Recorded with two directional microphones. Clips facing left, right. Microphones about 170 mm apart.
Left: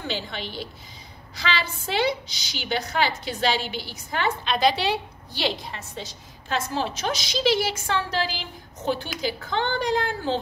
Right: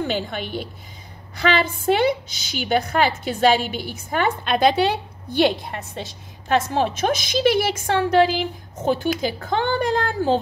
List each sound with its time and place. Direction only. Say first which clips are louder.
0.0 s a woman's voice: right 6 dB; 50° right (ahead or behind)